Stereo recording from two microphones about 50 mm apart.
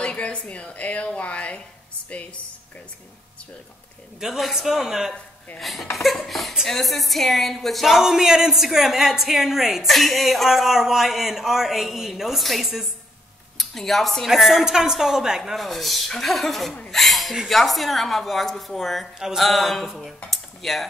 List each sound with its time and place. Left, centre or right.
0.0 s a woman's voice: left
4.2 s a man's voice: centre
15.5 s speech: centre
19.1 s a man's voice: centre